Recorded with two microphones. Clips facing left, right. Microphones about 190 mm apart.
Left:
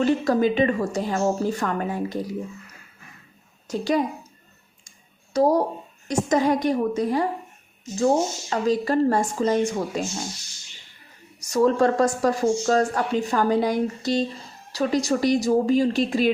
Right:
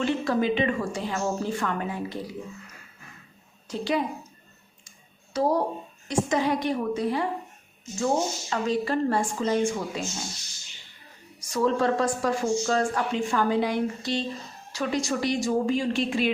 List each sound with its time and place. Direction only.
0.0 s speech: 40° left (ahead or behind)
3.7 s a woman's voice: 45° left (ahead or behind)
5.3 s a woman's voice: 40° left (ahead or behind)
11.3 s speech: 40° left (ahead or behind)